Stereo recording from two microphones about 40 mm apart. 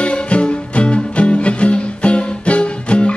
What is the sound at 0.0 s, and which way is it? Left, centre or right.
Music, left.